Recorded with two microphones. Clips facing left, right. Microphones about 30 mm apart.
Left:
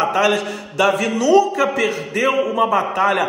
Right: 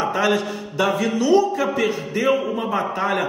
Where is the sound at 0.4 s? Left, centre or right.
Left.